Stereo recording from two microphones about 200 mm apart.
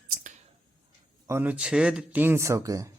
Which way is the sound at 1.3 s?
10° right (ahead or behind).